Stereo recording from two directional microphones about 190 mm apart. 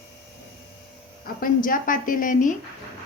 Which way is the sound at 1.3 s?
45° left (ahead or behind).